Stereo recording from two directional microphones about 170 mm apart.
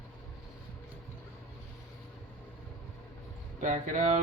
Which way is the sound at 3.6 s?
50° right (ahead or behind).